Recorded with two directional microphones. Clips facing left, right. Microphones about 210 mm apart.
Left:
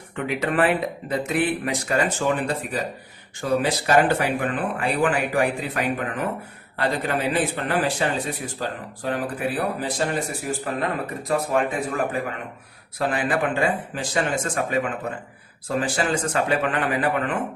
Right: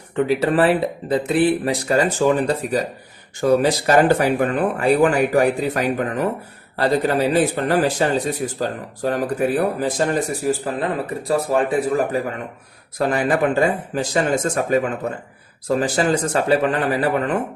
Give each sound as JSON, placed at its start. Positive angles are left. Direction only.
{"t": 0.3, "sound": "a man's voice", "side_deg": -35}
{"t": 15.8, "sound": "a man's voice", "side_deg": -40}